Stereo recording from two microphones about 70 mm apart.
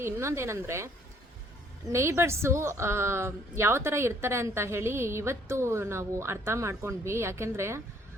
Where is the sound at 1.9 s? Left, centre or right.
Right.